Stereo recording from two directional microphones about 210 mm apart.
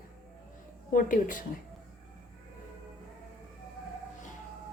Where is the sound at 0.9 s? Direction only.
40° left (ahead or behind).